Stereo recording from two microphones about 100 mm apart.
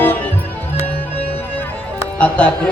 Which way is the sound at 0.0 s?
20° left (ahead or behind).